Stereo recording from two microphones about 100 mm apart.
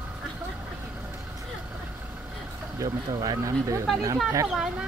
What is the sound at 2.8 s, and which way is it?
Speech, 40° right (ahead or behind).